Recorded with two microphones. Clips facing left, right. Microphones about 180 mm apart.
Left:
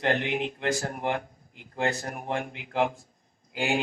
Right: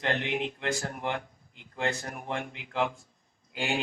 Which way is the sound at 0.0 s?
45° left (ahead or behind).